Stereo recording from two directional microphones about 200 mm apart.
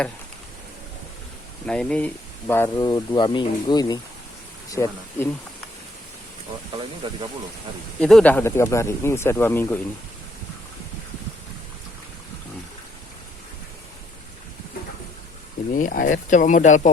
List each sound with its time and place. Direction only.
1.6 s speech: 5° left (ahead or behind)
2.5 s speech: 15° left (ahead or behind)
7.0 s speech: 25° right (ahead or behind)
8.0 s speech: 5° left (ahead or behind)
15.7 s speech: 45° left (ahead or behind)